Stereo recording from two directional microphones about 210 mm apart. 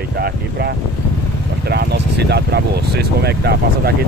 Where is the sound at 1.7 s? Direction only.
50° right (ahead or behind).